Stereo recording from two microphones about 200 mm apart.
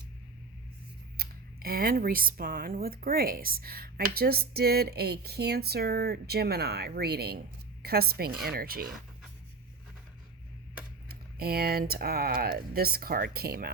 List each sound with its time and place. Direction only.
1.1 s speech: 50° right (ahead or behind)
11.1 s speech: 50° right (ahead or behind)